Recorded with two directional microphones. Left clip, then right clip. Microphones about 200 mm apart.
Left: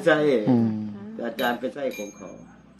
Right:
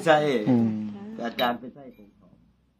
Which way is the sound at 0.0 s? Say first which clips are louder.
Left 1 dB; 45° right (ahead or behind).